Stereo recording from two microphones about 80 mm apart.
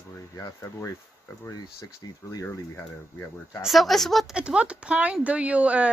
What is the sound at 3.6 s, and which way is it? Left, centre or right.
Speech, centre.